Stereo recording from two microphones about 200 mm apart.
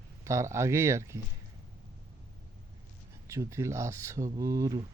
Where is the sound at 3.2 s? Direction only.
15° right (ahead or behind).